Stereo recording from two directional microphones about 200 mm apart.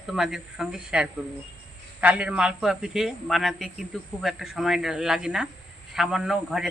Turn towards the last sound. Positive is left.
turn(degrees=0)  # may be behind; listen again after turning